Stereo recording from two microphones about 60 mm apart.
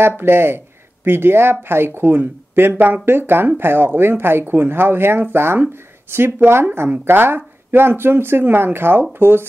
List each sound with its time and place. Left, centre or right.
0.2 s speech: right